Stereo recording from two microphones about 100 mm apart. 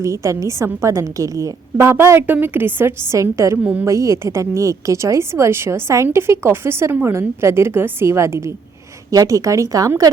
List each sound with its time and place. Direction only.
0.0 s a woman's voice: 30° right (ahead or behind)
3.6 s a woman's voice: 15° right (ahead or behind)
3.8 s a woman's voice: 30° right (ahead or behind)